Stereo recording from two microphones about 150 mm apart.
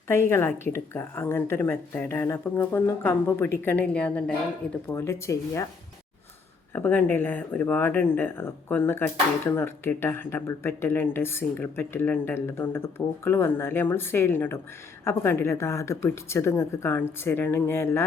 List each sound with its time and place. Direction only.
0.1 s speech: 15° left (ahead or behind)
6.7 s speech: 15° left (ahead or behind)